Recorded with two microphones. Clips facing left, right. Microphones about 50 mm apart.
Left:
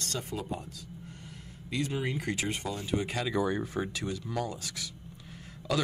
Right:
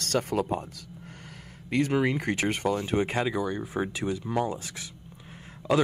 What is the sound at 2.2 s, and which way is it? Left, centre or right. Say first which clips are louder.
Speech: right 6 dB; right.